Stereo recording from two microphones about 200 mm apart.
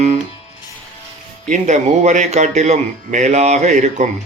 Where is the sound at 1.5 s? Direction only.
35° right (ahead or behind).